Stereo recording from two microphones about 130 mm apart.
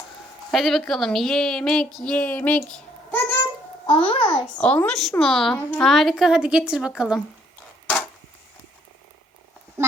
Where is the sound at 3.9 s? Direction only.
45° left (ahead or behind).